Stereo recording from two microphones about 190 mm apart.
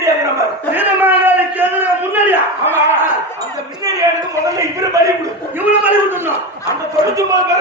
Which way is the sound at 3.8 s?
20° right (ahead or behind).